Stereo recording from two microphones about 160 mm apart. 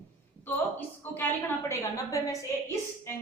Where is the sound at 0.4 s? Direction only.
10° left (ahead or behind).